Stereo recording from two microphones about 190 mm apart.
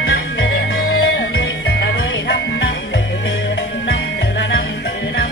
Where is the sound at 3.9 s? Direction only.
70° left (ahead or behind).